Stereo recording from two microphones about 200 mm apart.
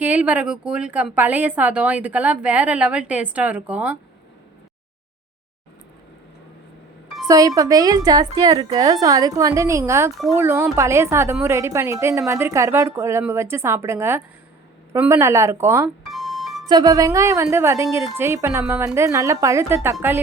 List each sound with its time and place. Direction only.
0.0 s a woman's voice: 5° right (ahead or behind)
7.3 s a woman's voice: 15° right (ahead or behind)
16.0 s music: centre (ahead or behind)
16.6 s a woman's voice: 20° right (ahead or behind)